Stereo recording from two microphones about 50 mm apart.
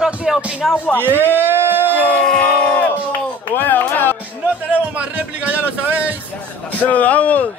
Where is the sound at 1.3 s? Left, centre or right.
Right.